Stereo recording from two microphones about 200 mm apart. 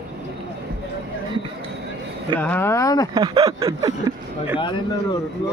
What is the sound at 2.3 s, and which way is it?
Speech, 10° left (ahead or behind).